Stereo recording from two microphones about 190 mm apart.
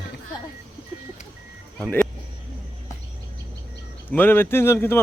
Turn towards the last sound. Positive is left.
turn(degrees=10)  # may be behind; listen again after turning